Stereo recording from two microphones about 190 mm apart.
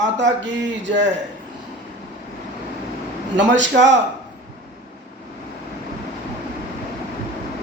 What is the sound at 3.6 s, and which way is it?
Speech, 70° right (ahead or behind).